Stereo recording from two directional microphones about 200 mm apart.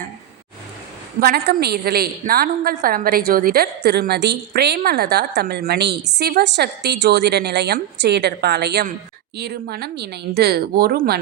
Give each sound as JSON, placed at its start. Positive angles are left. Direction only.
{"t": 1.2, "sound": "a woman's voice", "side_deg": -50}